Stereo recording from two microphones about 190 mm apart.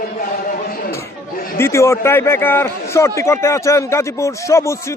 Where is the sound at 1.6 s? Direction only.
15° left (ahead or behind).